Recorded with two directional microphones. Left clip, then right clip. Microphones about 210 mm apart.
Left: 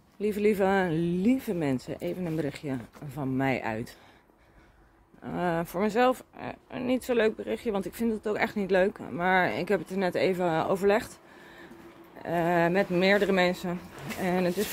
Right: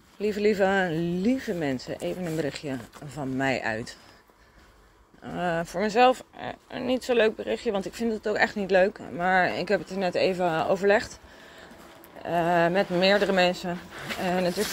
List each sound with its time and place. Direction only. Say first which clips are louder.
0.2 s speech: right 2 dB; 10° left (ahead or behind)
5.2 s speech: right 1 dB; 10° left (ahead or behind)
12.2 s speech: right 3 dB; 15° left (ahead or behind)